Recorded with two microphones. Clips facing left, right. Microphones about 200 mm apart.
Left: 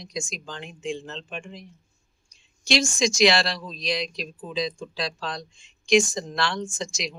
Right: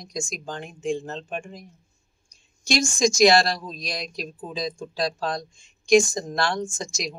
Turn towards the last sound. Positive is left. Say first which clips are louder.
# even
turn(degrees=-45)  # may be behind; listen again after turning